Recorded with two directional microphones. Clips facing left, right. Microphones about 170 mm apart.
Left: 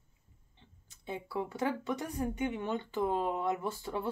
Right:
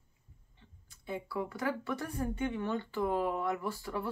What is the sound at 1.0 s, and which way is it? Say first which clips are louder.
A woman's voice: even; 25° left (ahead or behind).